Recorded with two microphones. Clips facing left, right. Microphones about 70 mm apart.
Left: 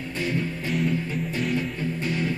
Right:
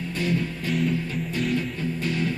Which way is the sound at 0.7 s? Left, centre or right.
Centre.